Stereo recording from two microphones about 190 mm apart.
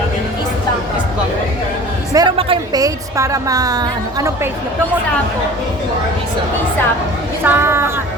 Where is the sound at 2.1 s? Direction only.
20° right (ahead or behind).